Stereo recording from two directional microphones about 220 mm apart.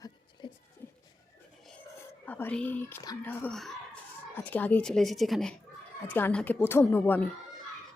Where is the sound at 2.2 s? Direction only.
10° left (ahead or behind).